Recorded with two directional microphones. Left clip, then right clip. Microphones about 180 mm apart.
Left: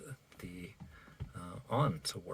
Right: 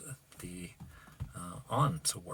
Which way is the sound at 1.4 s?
20° left (ahead or behind).